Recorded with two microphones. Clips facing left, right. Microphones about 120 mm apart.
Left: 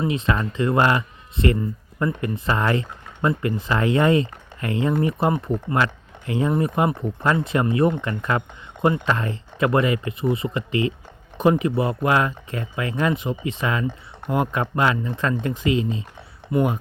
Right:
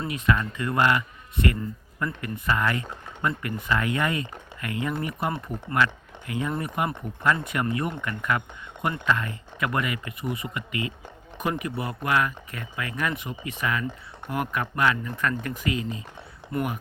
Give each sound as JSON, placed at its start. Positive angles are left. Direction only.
{"t": 0.0, "sound": "speech", "side_deg": 25}
{"t": 16.5, "sound": "speech", "side_deg": 10}